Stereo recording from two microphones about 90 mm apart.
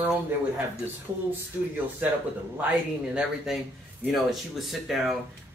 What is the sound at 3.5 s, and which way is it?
Speech, 5° right (ahead or behind).